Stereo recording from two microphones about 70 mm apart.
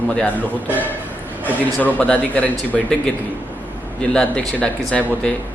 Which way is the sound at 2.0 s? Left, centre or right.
Left.